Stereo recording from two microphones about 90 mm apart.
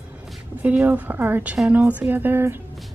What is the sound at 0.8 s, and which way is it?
Speech, 20° right (ahead or behind).